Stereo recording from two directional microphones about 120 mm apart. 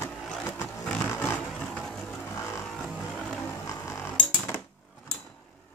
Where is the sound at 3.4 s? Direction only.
25° left (ahead or behind).